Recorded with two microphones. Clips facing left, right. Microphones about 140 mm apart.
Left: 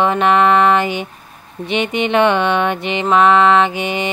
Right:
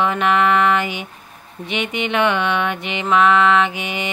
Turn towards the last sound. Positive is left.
turn(degrees=30)  # may be behind; listen again after turning